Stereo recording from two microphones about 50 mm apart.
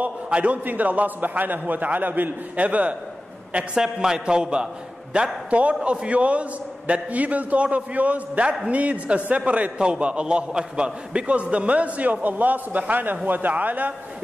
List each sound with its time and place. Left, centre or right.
0.0 s a man's voice: right
3.8 s a man's voice: centre; by 13.9 s right